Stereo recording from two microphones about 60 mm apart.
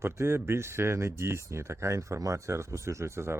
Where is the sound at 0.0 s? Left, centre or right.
Right.